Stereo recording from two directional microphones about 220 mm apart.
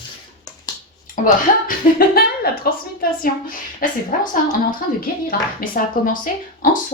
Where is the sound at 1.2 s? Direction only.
35° left (ahead or behind).